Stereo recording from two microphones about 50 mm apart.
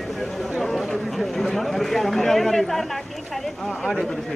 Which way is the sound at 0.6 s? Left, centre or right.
Centre.